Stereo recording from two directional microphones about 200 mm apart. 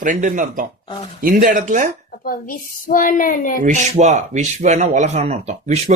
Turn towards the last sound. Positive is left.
turn(degrees=-35)  # may be behind; listen again after turning